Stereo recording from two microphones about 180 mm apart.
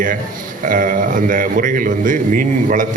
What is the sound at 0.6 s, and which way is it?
A man's voice, 50° right (ahead or behind).